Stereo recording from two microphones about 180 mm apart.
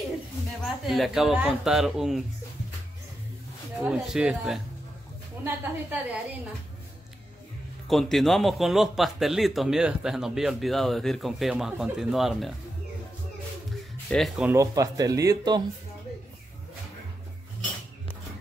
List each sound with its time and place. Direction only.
0.7 s a man's voice: centre (ahead or behind)
3.8 s a man's voice: 5° right (ahead or behind)
7.9 s a man's voice: centre (ahead or behind)
14.1 s a man's voice: centre (ahead or behind)
14.5 s speech: 20° right (ahead or behind)